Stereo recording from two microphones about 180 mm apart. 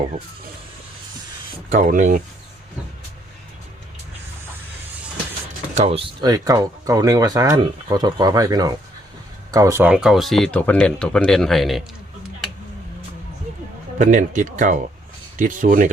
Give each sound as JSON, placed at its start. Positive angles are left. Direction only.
{"t": 1.7, "sound": "speech", "side_deg": -45}
{"t": 5.7, "sound": "speech", "side_deg": -35}
{"t": 6.2, "sound": "speech", "side_deg": -20}
{"t": 14.0, "sound": "speech", "side_deg": -45}